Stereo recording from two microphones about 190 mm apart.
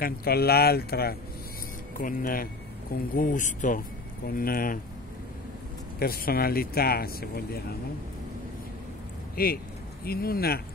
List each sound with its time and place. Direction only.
0.0 s speech: 55° left (ahead or behind)
5.9 s speech: 50° left (ahead or behind)
9.4 s speech: 50° left (ahead or behind)